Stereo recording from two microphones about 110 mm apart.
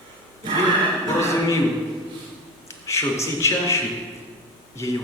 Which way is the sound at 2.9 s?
25° left (ahead or behind).